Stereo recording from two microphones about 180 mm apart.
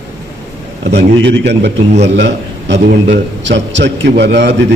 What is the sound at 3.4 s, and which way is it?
A man's voice, 80° right.